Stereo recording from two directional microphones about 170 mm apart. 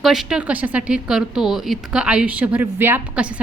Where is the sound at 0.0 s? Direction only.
Centre (ahead or behind).